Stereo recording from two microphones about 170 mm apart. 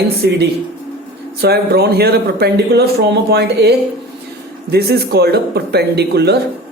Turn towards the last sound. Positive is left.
turn(degrees=-75)  # may be behind; listen again after turning